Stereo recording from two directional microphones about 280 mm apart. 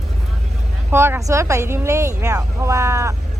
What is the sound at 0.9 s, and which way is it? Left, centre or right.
Speech, centre.